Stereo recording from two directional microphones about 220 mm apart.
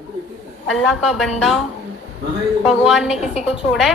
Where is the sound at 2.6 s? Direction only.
5° right (ahead or behind).